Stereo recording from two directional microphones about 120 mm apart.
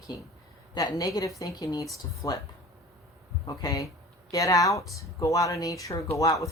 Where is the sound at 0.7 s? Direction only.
35° left (ahead or behind).